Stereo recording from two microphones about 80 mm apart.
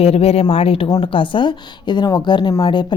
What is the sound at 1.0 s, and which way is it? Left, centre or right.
A woman's voice, left.